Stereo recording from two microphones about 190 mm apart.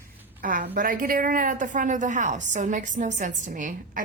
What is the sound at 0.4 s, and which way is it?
A woman's voice, 45° right (ahead or behind).